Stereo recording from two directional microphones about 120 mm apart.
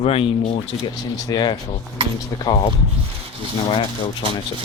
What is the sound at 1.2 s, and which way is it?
Speech, 35° left (ahead or behind).